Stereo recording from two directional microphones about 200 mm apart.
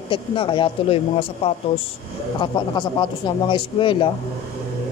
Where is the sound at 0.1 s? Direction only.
25° left (ahead or behind).